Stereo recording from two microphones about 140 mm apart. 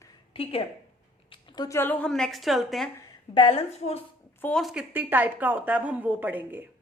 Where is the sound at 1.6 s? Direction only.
15° left (ahead or behind); by 2.8 s centre (ahead or behind).